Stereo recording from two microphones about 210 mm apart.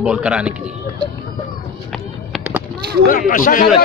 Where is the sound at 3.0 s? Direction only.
40° left (ahead or behind).